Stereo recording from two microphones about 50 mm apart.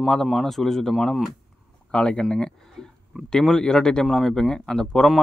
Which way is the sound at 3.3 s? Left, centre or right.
Centre.